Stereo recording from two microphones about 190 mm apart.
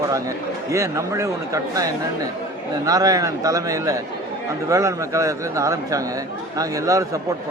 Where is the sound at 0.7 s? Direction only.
15° right (ahead or behind).